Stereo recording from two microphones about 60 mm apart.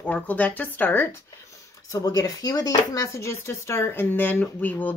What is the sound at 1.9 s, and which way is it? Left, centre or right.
Speech, left.